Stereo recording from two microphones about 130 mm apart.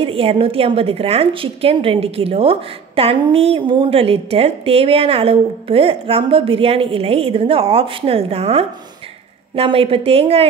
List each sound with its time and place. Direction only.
0.0 s a woman's voice: 45° right (ahead or behind)